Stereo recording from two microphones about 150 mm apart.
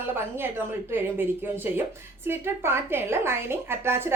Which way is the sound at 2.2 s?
15° right (ahead or behind).